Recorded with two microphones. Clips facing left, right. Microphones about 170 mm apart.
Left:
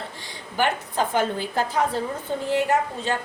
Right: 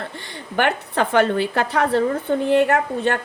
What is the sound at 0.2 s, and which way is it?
A woman's voice, 60° right (ahead or behind).